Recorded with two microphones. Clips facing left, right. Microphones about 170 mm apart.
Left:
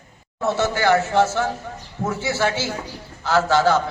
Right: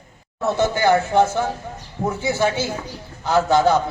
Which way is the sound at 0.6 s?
15° right (ahead or behind).